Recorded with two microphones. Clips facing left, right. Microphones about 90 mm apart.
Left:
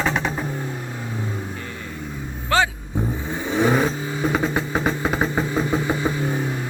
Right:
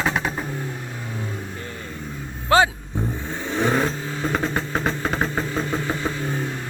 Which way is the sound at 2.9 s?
5° left (ahead or behind).